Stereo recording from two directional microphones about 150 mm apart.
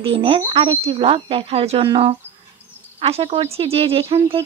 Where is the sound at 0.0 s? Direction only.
40° right (ahead or behind).